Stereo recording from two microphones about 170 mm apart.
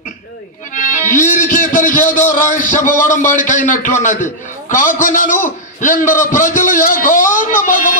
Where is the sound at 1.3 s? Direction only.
50° left (ahead or behind).